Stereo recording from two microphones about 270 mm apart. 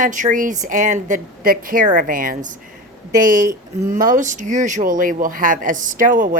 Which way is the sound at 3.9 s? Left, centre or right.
Right.